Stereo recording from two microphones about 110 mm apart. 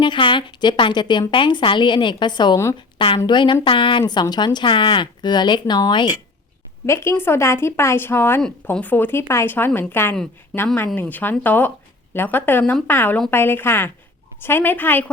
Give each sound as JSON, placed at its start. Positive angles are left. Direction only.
{"t": 0.0, "sound": "speech", "side_deg": 50}
{"t": 6.8, "sound": "a woman's voice", "side_deg": 25}